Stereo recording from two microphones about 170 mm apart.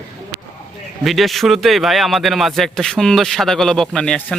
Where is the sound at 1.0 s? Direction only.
Centre (ahead or behind).